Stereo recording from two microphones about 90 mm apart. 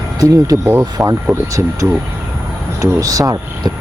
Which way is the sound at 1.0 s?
30° right (ahead or behind).